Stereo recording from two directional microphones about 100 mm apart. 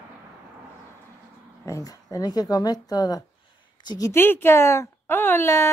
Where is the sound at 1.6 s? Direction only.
35° left (ahead or behind).